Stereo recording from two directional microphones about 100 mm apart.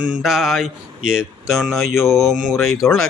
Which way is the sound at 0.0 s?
10° right (ahead or behind).